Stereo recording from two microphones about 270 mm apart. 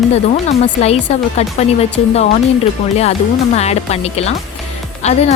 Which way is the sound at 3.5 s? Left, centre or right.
Left.